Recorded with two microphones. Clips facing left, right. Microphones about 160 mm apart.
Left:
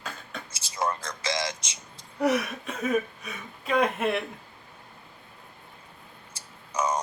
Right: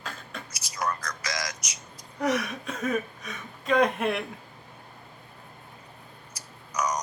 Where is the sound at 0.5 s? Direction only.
25° left (ahead or behind).